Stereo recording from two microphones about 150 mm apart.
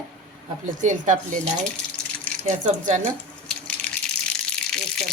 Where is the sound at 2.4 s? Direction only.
55° right (ahead or behind).